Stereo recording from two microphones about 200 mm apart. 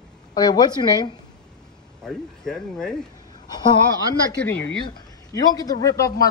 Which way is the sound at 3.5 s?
20° left (ahead or behind).